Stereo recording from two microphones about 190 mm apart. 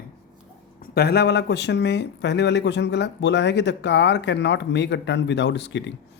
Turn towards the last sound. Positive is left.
turn(degrees=65)  # may be behind; listen again after turning